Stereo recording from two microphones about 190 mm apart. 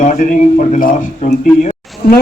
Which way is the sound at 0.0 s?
45° left (ahead or behind).